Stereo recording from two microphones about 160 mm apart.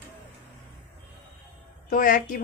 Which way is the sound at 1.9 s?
60° left (ahead or behind).